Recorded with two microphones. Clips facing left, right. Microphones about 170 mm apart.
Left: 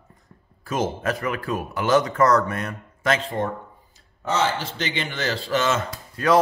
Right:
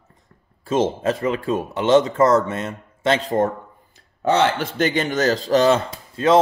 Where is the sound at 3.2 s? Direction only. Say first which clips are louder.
Right 7 dB; 40° right (ahead or behind).